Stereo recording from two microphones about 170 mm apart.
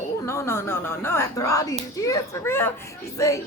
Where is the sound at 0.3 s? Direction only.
15° left (ahead or behind).